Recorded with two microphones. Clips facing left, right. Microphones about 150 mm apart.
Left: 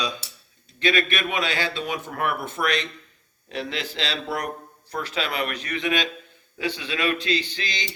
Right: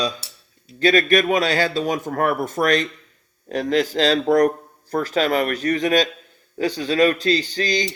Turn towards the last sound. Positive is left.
turn(degrees=-40)  # may be behind; listen again after turning